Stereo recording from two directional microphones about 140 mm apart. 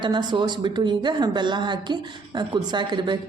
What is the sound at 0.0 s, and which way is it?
Speech, 30° right (ahead or behind).